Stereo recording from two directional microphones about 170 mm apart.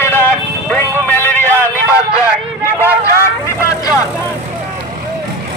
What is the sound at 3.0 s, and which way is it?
Vehicle, 15° left (ahead or behind).